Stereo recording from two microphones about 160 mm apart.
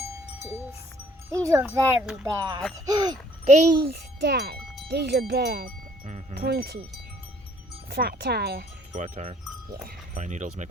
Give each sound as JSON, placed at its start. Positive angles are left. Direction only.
{"t": 1.3, "sound": "speech", "side_deg": -20}
{"t": 3.4, "sound": "a child's voice", "side_deg": -45}
{"t": 3.9, "sound": "wind chime", "side_deg": -90}
{"t": 4.9, "sound": "speech", "side_deg": -90}
{"t": 7.9, "sound": "speech", "side_deg": -80}
{"t": 8.9, "sound": "speech", "side_deg": -45}
{"t": 9.8, "sound": "speech", "side_deg": -50}